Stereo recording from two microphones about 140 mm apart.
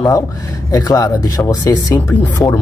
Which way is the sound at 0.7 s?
25° left (ahead or behind).